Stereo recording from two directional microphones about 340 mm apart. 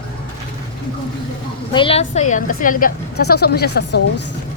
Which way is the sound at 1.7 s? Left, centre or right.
Centre.